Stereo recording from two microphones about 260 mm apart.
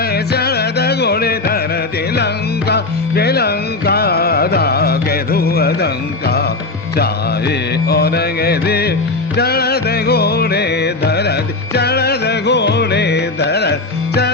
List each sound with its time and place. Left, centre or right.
0.0 s music: left